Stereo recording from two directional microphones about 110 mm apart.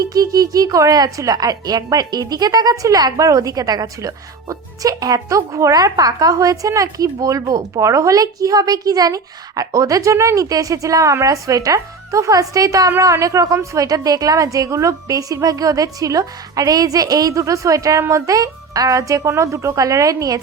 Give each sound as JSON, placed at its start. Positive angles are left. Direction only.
{"t": 0.0, "sound": "a woman's voice", "side_deg": -35}